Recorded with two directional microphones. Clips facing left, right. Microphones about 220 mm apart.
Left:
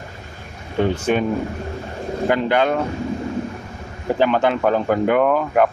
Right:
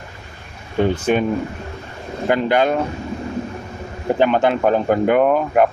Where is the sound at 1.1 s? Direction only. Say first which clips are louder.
Right 1 dB; 15° right (ahead or behind).